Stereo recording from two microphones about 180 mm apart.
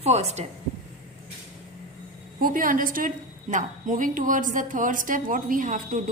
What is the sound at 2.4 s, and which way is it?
A woman's voice, 50° right (ahead or behind).